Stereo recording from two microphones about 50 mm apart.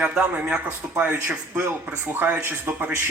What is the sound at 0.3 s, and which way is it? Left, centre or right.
A man's voice, right.